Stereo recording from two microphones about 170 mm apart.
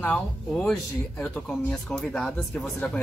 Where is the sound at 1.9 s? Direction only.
5° left (ahead or behind).